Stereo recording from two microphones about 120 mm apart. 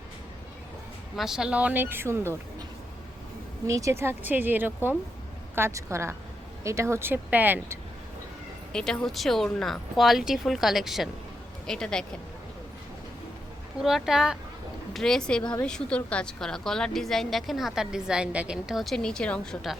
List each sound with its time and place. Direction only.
1.1 s speech: 5° right (ahead or behind); by 2.3 s 20° right (ahead or behind)
3.7 s speech: 25° right (ahead or behind)
8.7 s a woman's voice: 5° left (ahead or behind)
13.7 s a woman's voice: 5° right (ahead or behind)